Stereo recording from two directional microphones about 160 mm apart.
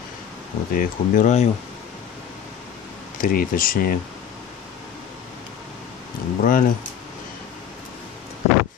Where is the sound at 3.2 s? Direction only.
60° left (ahead or behind).